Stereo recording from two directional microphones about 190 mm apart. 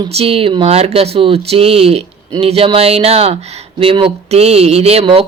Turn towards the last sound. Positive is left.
turn(degrees=-30)  # may be behind; listen again after turning